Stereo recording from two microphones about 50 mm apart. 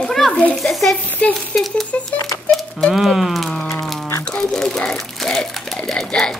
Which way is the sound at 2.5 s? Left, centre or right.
Centre.